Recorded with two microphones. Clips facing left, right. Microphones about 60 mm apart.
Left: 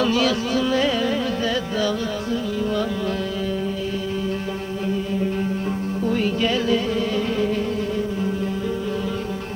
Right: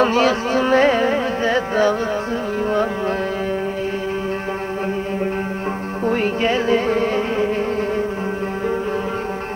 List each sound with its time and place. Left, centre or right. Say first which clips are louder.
0.0 s carnatic music: right 4 dB; right
6.1 s music: right 3 dB; right